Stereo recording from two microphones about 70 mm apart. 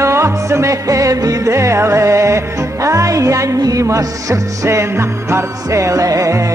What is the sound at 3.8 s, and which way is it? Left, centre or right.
Music, right.